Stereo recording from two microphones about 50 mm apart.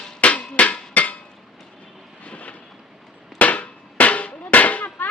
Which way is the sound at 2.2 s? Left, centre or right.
Left.